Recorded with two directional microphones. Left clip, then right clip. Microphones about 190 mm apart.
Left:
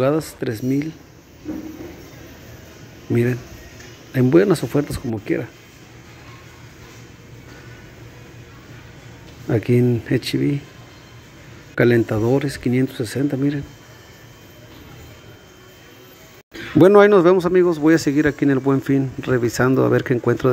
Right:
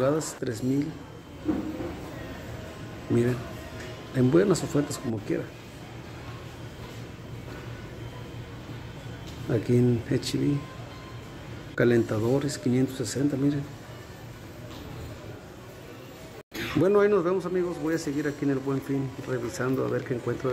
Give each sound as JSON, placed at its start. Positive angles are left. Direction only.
{"t": 0.0, "sound": "speech", "side_deg": 30}
{"t": 4.1, "sound": "speech", "side_deg": 35}
{"t": 9.5, "sound": "speech", "side_deg": 35}
{"t": 11.7, "sound": "speech", "side_deg": 30}
{"t": 16.8, "sound": "a man's voice", "side_deg": 40}